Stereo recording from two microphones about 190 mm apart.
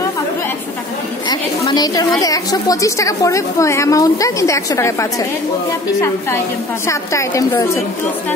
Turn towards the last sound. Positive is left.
turn(degrees=15)  # may be behind; listen again after turning